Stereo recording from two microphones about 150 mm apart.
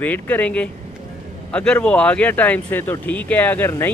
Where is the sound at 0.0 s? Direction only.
10° left (ahead or behind).